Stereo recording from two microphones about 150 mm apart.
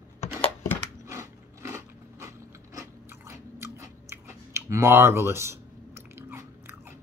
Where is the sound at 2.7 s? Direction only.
20° right (ahead or behind).